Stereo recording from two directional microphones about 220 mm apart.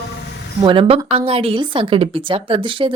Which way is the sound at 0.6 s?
25° right (ahead or behind).